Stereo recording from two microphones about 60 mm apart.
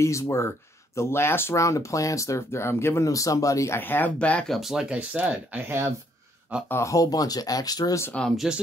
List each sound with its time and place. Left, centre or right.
0.0 s speech: left
1.5 s speech: left
3.7 s speech: left
4.2 s speech: left
4.5 s speech: centre
4.8 s speech: right
5.7 s speech: right
6.8 s speech: left
8.5 s speech: centre